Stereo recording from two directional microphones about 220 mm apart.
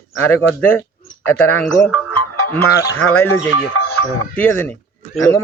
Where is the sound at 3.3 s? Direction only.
70° left (ahead or behind).